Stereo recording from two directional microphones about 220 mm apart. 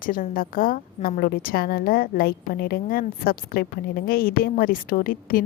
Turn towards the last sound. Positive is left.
turn(degrees=40)  # may be behind; listen again after turning